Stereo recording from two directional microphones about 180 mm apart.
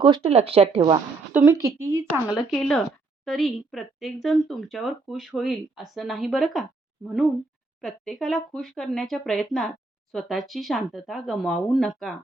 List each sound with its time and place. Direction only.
0.0 s speech: 30° right (ahead or behind)
1.3 s a woman's voice: 10° right (ahead or behind)
7.8 s speech: centre (ahead or behind)